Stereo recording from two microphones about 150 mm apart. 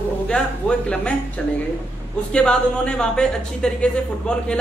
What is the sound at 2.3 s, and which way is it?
Speech, 5° left (ahead or behind).